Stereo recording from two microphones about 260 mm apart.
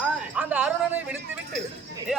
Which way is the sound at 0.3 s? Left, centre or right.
Centre.